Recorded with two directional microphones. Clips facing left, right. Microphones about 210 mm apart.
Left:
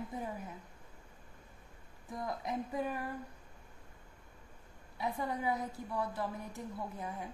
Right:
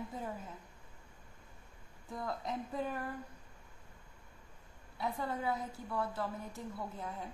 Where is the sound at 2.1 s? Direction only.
15° left (ahead or behind).